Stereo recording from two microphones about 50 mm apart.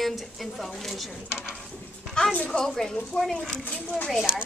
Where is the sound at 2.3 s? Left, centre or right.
Left.